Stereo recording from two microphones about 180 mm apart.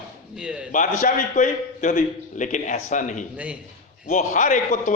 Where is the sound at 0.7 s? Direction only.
50° left (ahead or behind).